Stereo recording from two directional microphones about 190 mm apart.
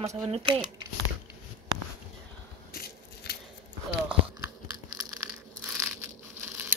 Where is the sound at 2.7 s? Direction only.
55° left (ahead or behind).